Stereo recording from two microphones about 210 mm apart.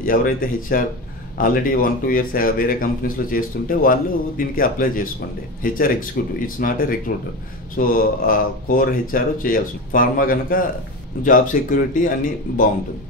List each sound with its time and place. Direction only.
0.0 s speech: 40° left (ahead or behind)